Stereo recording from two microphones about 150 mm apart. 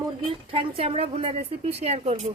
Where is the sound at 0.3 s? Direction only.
35° right (ahead or behind).